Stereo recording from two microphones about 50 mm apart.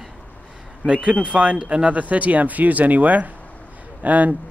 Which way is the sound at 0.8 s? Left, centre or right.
Right.